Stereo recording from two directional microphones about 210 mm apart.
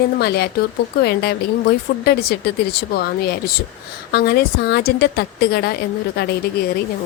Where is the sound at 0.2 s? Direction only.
50° left (ahead or behind).